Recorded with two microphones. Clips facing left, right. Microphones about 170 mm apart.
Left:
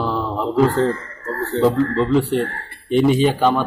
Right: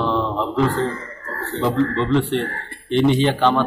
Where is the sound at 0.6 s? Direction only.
45° left (ahead or behind).